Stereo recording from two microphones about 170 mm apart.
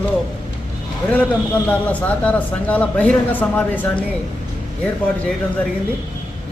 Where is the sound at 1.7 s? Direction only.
10° left (ahead or behind).